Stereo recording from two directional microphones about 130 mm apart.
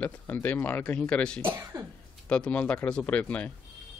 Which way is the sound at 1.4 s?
20° right (ahead or behind).